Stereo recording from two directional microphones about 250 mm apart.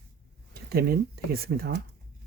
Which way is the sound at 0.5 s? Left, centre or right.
Right.